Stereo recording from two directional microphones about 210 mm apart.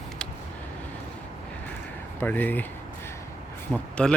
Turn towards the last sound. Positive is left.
turn(degrees=5)  # may be behind; listen again after turning